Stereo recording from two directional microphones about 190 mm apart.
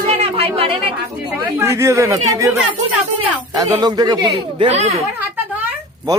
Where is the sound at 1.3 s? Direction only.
10° right (ahead or behind).